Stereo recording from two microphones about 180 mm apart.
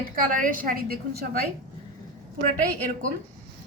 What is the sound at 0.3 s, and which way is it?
A woman's voice, 50° right (ahead or behind).